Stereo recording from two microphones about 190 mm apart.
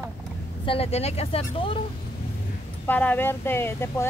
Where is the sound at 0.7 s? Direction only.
30° left (ahead or behind).